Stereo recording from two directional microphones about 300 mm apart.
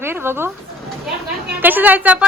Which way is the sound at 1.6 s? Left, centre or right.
Centre.